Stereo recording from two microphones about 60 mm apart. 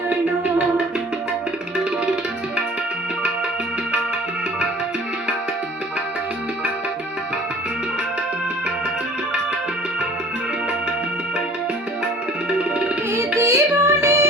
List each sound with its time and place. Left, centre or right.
12.5 s music: centre
13.1 s music: right